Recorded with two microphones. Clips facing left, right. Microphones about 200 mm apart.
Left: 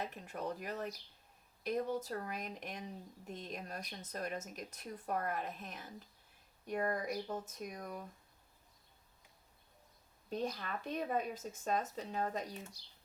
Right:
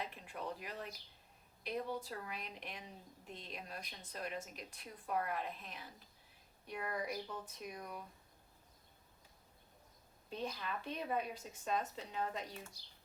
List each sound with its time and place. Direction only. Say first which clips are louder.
0.0 s speech: left 3 dB; 45° left (ahead or behind)
10.2 s speech: left 4 dB; 45° left (ahead or behind)